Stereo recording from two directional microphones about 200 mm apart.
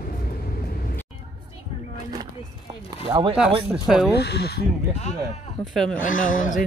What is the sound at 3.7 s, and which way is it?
Speech, 5° right (ahead or behind).